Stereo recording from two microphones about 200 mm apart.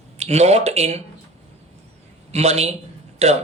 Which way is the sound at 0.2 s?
35° right (ahead or behind).